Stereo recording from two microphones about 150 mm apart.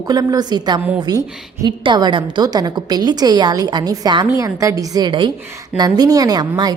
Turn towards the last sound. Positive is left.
turn(degrees=-25)  # may be behind; listen again after turning